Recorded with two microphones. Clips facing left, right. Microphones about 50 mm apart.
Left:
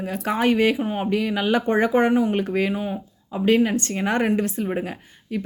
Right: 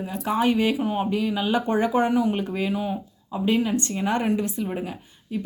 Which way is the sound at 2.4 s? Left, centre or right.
Left.